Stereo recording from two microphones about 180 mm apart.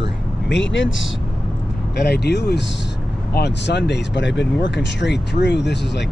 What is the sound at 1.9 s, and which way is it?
Speech, 65° left (ahead or behind).